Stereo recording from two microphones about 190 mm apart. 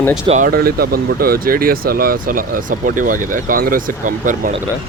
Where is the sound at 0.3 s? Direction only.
45° right (ahead or behind).